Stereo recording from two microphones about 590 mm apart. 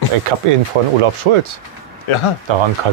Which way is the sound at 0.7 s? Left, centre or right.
Right.